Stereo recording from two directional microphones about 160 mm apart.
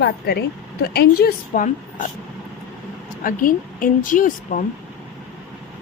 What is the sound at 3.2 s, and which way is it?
A woman's voice, 60° left (ahead or behind).